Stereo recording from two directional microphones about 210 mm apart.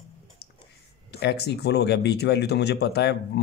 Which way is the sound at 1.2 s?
50° left (ahead or behind).